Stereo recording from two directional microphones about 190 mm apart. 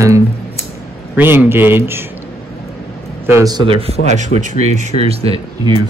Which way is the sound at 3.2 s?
15° right (ahead or behind).